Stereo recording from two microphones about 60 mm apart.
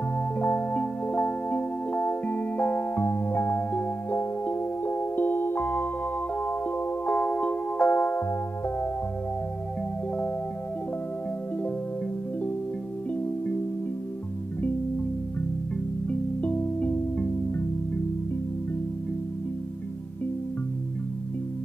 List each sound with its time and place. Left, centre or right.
0.4 s music: left
7.1 s music: centre
16.1 s music: left